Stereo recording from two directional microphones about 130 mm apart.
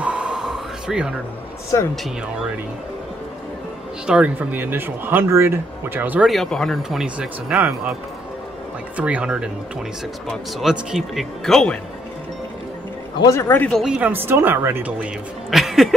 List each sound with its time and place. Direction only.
0.0 s a sound: 10° right (ahead or behind)
1.7 s speech: 25° left (ahead or behind)
4.0 s speech: 10° right (ahead or behind)
6.2 s speech: centre (ahead or behind)
8.9 s speech: 10° right (ahead or behind); by 11.8 s 5° left (ahead or behind)
13.3 s speech: 20° left (ahead or behind)
13.8 s speech: 10° right (ahead or behind)
15.5 s speech: centre (ahead or behind)